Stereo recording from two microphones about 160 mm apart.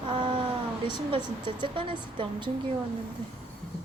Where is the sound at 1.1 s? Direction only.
30° right (ahead or behind).